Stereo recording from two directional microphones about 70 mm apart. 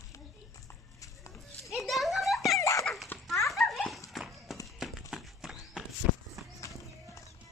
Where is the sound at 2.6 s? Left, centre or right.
Left.